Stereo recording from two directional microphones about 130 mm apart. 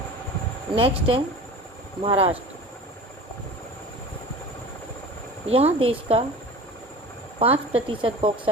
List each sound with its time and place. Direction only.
0.8 s speech: 45° right (ahead or behind)
5.5 s speech: 50° right (ahead or behind)
7.3 s speech: 45° right (ahead or behind)